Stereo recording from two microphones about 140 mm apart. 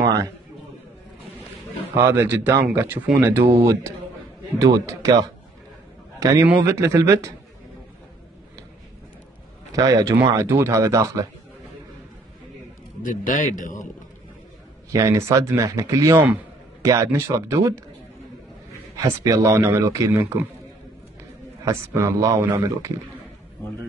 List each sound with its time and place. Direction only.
2.0 s speech: 15° right (ahead or behind)
6.1 s a sound: 25° right (ahead or behind)
6.4 s speech: 15° right (ahead or behind)
9.8 s speech: 25° right (ahead or behind)
13.0 s a man's voice: 70° left (ahead or behind)
14.9 s speech: 20° right (ahead or behind)
18.9 s speech: 25° right (ahead or behind)
21.6 s speech: 20° right (ahead or behind)